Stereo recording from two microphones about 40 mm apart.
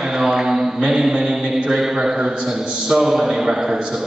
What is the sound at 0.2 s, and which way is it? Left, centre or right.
Mantra, centre.